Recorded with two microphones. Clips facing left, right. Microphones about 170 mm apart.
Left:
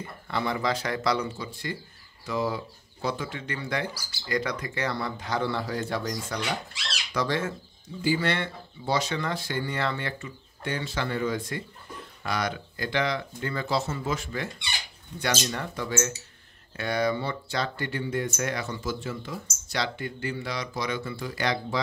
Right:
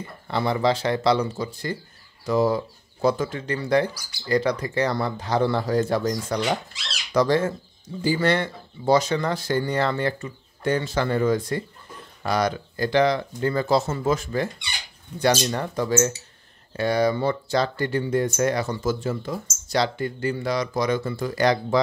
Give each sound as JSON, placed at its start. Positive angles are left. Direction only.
{"t": 0.3, "sound": "speech", "side_deg": -30}